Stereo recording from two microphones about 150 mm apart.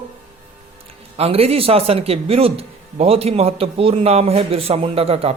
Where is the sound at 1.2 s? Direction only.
40° right (ahead or behind).